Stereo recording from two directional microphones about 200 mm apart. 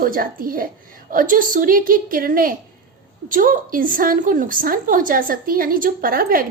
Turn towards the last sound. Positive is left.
turn(degrees=-45)  # may be behind; listen again after turning